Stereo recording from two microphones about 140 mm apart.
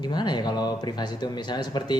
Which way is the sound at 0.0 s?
30° left (ahead or behind).